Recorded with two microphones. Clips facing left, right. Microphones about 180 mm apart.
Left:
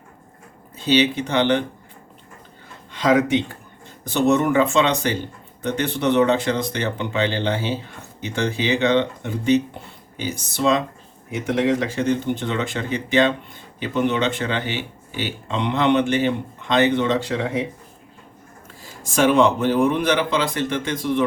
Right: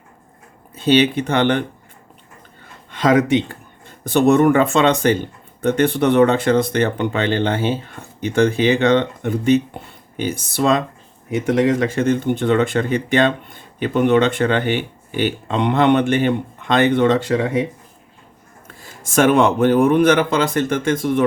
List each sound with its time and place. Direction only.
0.9 s speech: 55° right (ahead or behind)
2.9 s speech: 50° right (ahead or behind)
19.1 s speech: 50° right (ahead or behind)